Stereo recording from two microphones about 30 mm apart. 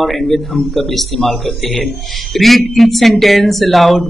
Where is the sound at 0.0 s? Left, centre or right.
Centre.